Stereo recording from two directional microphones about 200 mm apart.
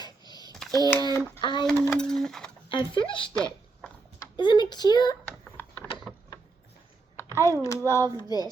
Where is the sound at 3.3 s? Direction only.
5° left (ahead or behind).